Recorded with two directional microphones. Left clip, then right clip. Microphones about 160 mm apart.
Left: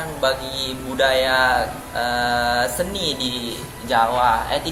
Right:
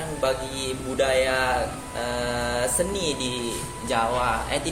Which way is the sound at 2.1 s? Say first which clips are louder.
Left 7 dB; 35° right (ahead or behind).